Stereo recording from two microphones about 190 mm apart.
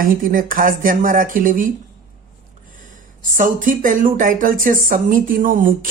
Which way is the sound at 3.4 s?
45° right (ahead or behind).